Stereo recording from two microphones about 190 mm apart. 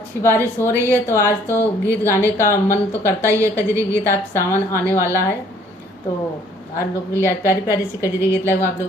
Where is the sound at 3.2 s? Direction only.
15° right (ahead or behind).